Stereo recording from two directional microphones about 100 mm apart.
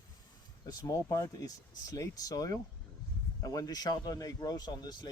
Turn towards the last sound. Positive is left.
turn(degrees=45)  # may be behind; listen again after turning